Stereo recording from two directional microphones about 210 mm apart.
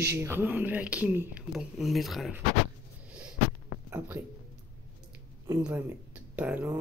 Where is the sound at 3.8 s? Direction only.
10° right (ahead or behind).